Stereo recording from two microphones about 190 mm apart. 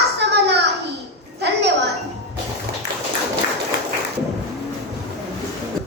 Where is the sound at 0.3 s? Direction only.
60° right (ahead or behind).